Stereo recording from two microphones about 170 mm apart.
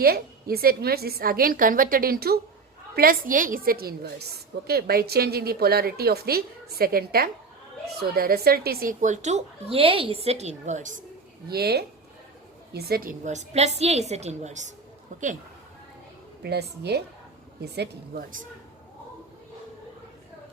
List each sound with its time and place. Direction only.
0.0 s a woman's voice: 65° right (ahead or behind); by 10.9 s 45° right (ahead or behind)
11.4 s a woman's voice: 70° right (ahead or behind); by 15.3 s 45° right (ahead or behind)
16.4 s a woman's voice: 75° right (ahead or behind); by 18.4 s 55° right (ahead or behind)